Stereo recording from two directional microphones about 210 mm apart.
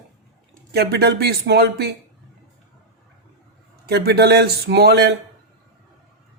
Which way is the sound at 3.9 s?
50° right (ahead or behind).